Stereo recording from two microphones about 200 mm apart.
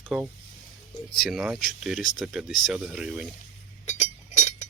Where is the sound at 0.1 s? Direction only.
Centre (ahead or behind).